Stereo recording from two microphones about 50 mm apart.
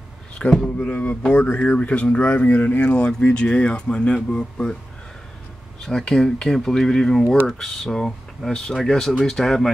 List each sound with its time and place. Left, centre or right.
0.5 s speech: centre
0.8 s speech: left
5.9 s speech: centre